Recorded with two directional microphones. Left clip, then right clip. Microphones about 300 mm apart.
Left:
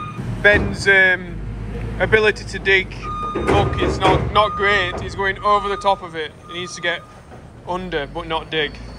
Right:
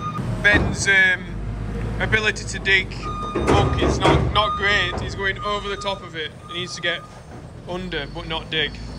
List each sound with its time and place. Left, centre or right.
0.4 s speech: centre